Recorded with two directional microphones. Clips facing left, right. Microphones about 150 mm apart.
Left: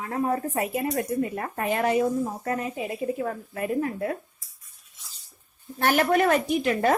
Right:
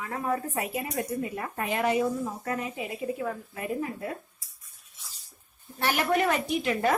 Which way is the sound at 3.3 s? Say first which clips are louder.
Left 4 dB; 55° left (ahead or behind).